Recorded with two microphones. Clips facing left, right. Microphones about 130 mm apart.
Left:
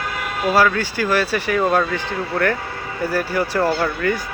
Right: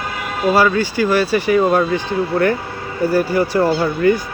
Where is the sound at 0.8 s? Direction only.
Centre (ahead or behind).